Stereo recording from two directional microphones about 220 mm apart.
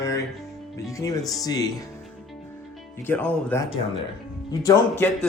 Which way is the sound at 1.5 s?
15° left (ahead or behind).